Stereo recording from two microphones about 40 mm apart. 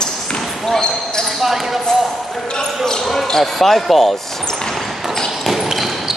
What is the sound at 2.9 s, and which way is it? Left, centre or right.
Speech, centre.